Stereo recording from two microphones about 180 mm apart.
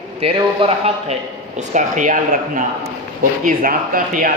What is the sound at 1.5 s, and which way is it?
A man's voice, 45° right (ahead or behind).